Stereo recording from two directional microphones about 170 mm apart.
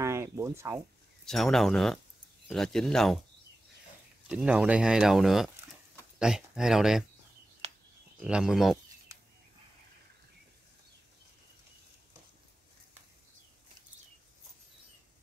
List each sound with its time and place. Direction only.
0.0 s a sound: 15° right (ahead or behind)
1.2 s speech: centre (ahead or behind)
4.3 s speech: 5° right (ahead or behind)
8.2 s speech: 5° right (ahead or behind)